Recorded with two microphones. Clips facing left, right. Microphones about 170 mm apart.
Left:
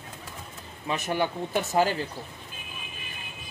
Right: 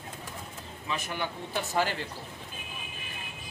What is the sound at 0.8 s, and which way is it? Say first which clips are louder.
Speech: left 7 dB; 45° left (ahead or behind).